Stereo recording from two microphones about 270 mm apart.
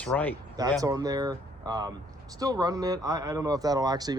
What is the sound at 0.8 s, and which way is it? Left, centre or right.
Speech, centre.